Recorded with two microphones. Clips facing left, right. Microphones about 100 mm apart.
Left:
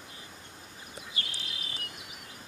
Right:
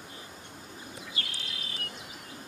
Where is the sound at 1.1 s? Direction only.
25° left (ahead or behind).